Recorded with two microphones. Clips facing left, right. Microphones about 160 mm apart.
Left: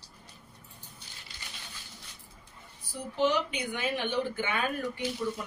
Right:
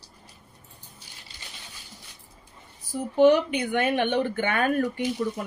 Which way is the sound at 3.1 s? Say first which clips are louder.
Right 10 dB; 55° right (ahead or behind).